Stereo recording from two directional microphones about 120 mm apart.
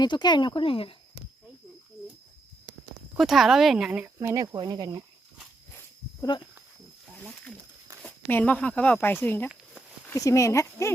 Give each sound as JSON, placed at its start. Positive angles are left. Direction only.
{"t": 0.0, "sound": "speech", "side_deg": 35}
{"t": 3.2, "sound": "speech", "side_deg": 0}
{"t": 4.2, "sound": "speech", "side_deg": -20}
{"t": 4.5, "sound": "speech", "side_deg": -35}
{"t": 8.3, "sound": "speech", "side_deg": 15}
{"t": 10.1, "sound": "speech", "side_deg": 25}